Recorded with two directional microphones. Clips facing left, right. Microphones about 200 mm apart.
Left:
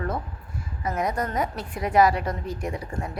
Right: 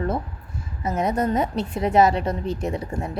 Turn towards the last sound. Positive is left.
turn(degrees=-25)  # may be behind; listen again after turning